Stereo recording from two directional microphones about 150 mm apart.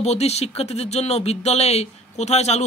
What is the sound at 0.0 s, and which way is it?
Speech, 45° left (ahead or behind).